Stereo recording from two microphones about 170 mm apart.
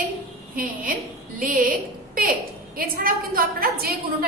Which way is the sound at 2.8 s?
60° right (ahead or behind).